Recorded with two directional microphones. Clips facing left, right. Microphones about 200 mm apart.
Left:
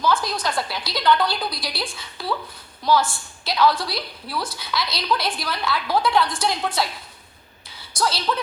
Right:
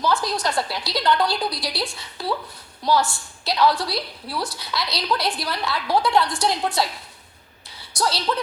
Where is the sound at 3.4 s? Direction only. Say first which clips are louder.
Even; centre (ahead or behind).